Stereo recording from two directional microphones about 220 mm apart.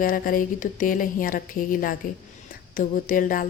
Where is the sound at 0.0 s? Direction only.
40° left (ahead or behind).